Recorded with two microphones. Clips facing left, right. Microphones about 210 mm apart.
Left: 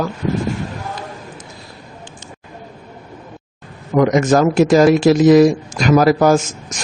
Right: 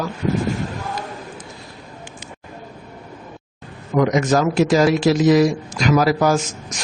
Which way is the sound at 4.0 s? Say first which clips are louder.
Left 4 dB; 50° left (ahead or behind).